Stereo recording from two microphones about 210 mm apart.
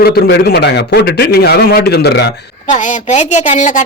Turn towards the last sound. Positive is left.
turn(degrees=35)  # may be behind; listen again after turning